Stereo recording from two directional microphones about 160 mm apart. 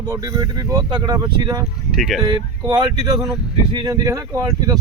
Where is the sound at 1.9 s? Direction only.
Centre (ahead or behind).